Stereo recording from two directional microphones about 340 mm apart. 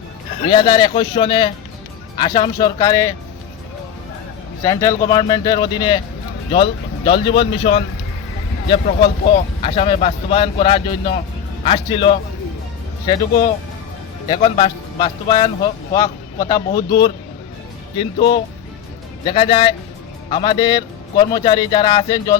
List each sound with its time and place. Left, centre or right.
0.5 s speech: centre
4.6 s speech: centre
14.3 s speech: centre